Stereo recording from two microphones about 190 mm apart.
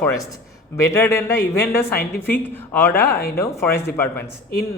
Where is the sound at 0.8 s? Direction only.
15° left (ahead or behind).